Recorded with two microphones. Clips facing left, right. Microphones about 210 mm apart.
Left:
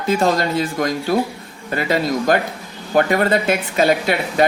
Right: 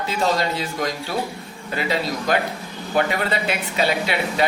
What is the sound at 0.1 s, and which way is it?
Speech, 50° left (ahead or behind).